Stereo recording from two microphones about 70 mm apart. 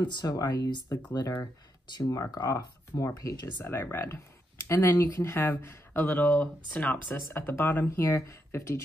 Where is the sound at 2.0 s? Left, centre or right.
Left.